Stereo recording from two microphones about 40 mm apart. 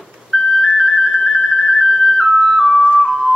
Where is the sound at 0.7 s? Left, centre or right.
Centre.